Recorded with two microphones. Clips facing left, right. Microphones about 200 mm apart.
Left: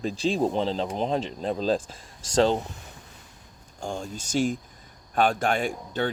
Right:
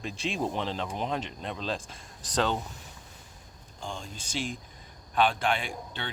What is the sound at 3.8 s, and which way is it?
Speech, 45° left (ahead or behind).